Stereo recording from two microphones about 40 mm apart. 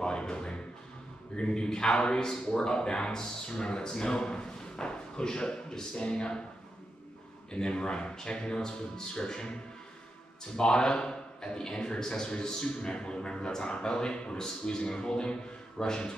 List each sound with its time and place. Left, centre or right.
0.0 s music: left
1.3 s speech: left
7.5 s speech: left
10.5 s speech: centre